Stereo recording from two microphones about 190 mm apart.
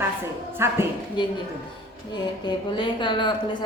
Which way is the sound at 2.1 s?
25° left (ahead or behind).